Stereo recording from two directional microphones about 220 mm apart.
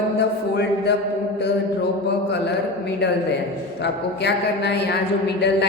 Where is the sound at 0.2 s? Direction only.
50° left (ahead or behind).